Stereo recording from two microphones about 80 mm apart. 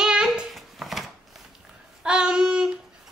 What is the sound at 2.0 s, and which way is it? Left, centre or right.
Child singing, centre.